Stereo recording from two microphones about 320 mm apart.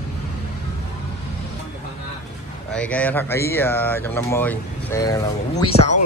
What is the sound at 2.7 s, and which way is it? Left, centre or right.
Speech, centre.